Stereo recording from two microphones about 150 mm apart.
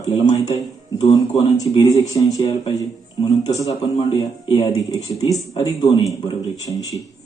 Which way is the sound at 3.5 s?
20° left (ahead or behind).